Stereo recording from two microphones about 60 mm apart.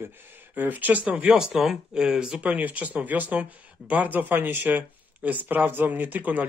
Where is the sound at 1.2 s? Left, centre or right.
Centre.